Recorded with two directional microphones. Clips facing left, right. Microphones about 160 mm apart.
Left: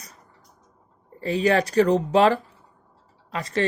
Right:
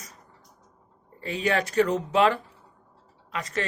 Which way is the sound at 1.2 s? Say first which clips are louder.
Left 5 dB; 35° left (ahead or behind).